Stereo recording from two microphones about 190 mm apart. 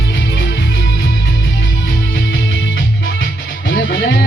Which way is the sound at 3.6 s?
75° left (ahead or behind).